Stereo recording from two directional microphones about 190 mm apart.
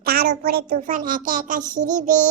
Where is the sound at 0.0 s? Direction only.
55° right (ahead or behind).